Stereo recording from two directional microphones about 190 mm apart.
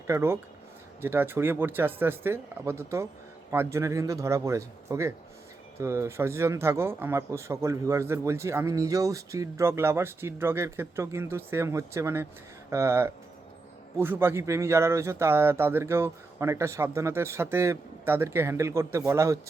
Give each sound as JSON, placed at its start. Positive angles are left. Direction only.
{"t": 0.1, "sound": "speech", "side_deg": -15}